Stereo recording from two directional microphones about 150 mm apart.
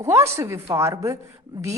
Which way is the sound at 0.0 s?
20° right (ahead or behind).